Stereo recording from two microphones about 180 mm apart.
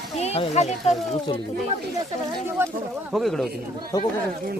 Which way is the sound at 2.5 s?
10° right (ahead or behind).